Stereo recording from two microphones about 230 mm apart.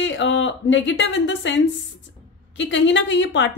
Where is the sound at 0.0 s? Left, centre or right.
Left.